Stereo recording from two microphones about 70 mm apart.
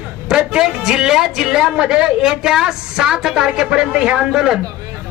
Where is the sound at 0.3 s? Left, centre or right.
Centre.